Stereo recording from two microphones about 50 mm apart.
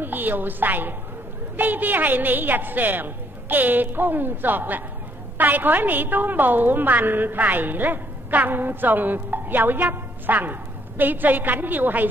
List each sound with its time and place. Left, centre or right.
0.0 s a woman's voice: right